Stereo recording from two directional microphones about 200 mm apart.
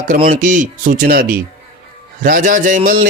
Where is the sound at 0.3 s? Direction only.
40° right (ahead or behind).